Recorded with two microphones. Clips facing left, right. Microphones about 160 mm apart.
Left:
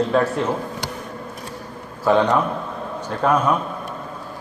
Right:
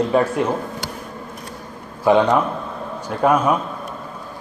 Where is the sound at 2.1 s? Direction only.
10° right (ahead or behind).